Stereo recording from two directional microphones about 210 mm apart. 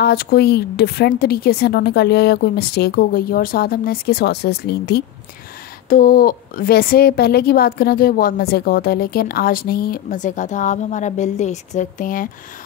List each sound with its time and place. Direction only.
0.0 s a woman's voice: 50° left (ahead or behind)